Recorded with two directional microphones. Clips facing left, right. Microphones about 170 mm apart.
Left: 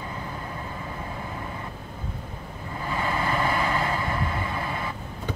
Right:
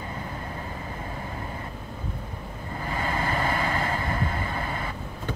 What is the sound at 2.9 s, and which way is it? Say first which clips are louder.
Vehicle: left 2 dB; 40° right (ahead or behind).